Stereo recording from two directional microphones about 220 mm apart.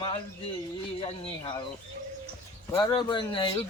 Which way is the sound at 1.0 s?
25° left (ahead or behind).